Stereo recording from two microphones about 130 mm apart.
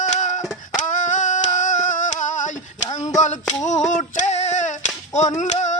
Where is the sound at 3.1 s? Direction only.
65° left (ahead or behind).